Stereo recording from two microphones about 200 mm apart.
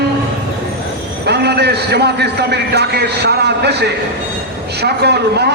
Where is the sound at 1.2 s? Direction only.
55° right (ahead or behind).